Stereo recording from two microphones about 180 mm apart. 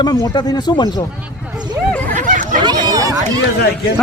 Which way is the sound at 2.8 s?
20° right (ahead or behind).